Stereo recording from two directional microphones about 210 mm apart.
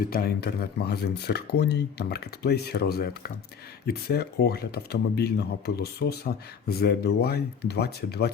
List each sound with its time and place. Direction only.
0.0 s speech: 45° left (ahead or behind)